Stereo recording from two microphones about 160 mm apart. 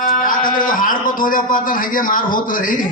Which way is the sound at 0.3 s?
60° left (ahead or behind).